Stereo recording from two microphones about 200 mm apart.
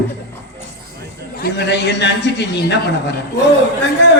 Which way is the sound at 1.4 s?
60° left (ahead or behind).